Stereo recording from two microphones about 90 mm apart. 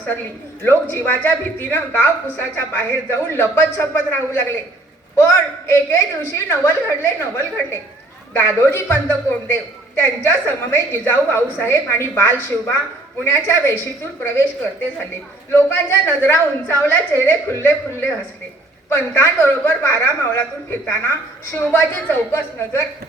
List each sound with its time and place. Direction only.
0.6 s a man's voice: 25° left (ahead or behind)
15.5 s a man's voice: 25° left (ahead or behind)